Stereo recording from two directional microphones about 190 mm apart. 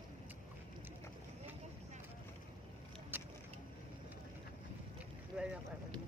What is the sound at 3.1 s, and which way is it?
Vehicle, 10° right (ahead or behind).